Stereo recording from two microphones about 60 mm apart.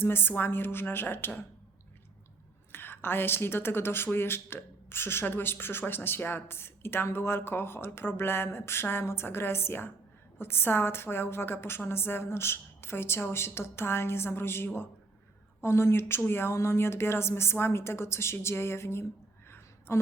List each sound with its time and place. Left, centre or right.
0.0 s speech: left
2.7 s speech: left
19.5 s a sound: left